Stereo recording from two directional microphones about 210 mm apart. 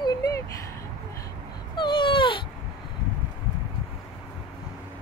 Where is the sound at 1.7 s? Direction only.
20° left (ahead or behind).